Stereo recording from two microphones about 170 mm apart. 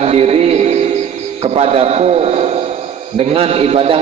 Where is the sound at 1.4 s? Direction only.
35° right (ahead or behind).